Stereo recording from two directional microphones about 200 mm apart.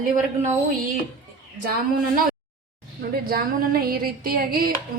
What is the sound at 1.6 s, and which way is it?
Speech, 45° right (ahead or behind).